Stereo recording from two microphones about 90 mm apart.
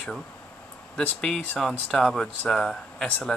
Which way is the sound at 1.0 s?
15° left (ahead or behind).